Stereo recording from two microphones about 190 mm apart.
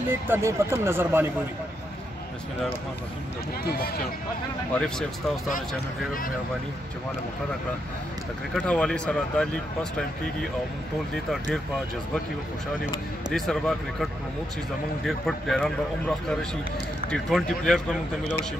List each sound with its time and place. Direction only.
0.1 s speech: 15° right (ahead or behind)
3.6 s speech: 55° left (ahead or behind)
4.7 s speech: 5° left (ahead or behind)
8.5 s speech: 5° left (ahead or behind)
13.3 s speech: centre (ahead or behind)
15.0 s speech: centre (ahead or behind)